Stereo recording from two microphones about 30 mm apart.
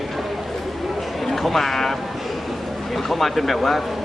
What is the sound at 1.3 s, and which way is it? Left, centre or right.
Speech, centre.